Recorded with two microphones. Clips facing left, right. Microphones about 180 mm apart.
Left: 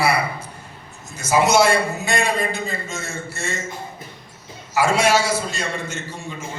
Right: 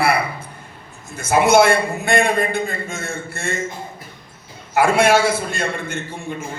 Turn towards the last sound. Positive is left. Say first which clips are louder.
# right 3 dB
turn(degrees=-55)  # may be behind; listen again after turning